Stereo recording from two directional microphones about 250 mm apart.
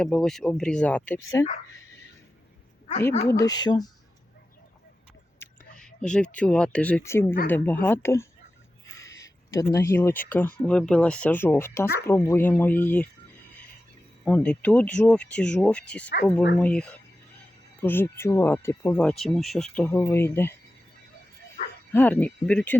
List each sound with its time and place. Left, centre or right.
0.0 s speech: centre
3.2 s speech: centre
5.8 s speech: centre
9.0 s a sound: centre
9.7 s speech: centre
14.3 s speech: centre
21.9 s speech: centre